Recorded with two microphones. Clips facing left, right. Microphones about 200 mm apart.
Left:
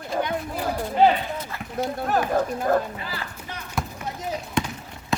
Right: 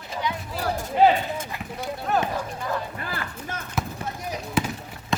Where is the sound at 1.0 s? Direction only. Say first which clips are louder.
Even; centre (ahead or behind).